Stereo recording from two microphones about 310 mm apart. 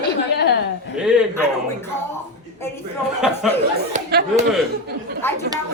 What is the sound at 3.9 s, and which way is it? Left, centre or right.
Speech, right.